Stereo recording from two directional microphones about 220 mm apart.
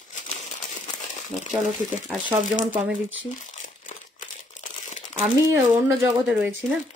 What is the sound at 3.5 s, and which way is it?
Crumpling, 35° left (ahead or behind).